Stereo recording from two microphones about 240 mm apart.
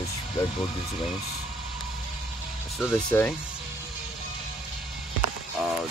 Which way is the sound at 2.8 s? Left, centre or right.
Centre.